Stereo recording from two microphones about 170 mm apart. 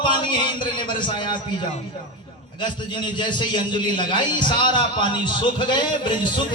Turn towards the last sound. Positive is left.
turn(degrees=25)  # may be behind; listen again after turning